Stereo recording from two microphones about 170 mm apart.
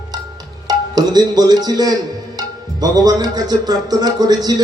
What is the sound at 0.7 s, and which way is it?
A man's voice, 25° right (ahead or behind).